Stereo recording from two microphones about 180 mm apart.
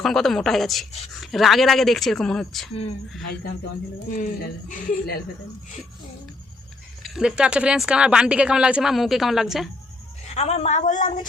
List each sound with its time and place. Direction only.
0.0 s speech: centre (ahead or behind)
4.1 s a woman's voice: 45° left (ahead or behind)
7.0 s speech: centre (ahead or behind)
10.3 s a woman's voice: 35° left (ahead or behind)